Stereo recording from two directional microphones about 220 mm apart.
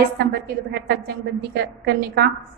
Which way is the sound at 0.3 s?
45° right (ahead or behind).